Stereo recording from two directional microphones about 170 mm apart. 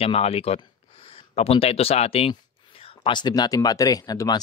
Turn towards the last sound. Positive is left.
turn(degrees=25)  # may be behind; listen again after turning